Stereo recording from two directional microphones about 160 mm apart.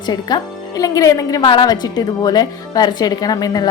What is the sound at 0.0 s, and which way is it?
A woman's voice, 25° left (ahead or behind).